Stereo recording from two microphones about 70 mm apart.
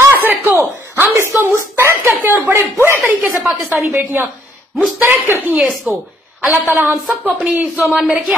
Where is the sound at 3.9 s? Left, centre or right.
Right.